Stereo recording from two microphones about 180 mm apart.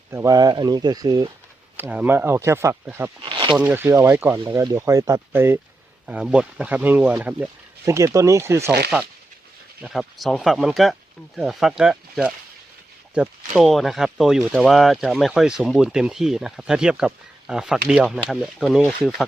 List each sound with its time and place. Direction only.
0.1 s speech: 15° right (ahead or behind)
1.7 s speech: 10° right (ahead or behind)
3.2 s speech: 30° right (ahead or behind)
3.6 s speech: 10° right (ahead or behind)